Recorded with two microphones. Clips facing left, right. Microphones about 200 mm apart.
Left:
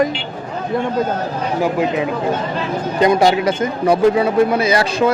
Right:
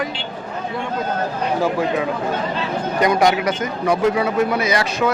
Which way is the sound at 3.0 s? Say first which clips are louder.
Left 3 dB; 25° left (ahead or behind).